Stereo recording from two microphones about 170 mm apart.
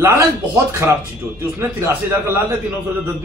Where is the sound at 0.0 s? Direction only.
15° right (ahead or behind).